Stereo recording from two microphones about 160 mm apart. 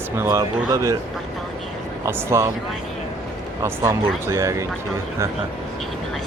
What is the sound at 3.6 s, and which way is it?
Speech, 15° right (ahead or behind).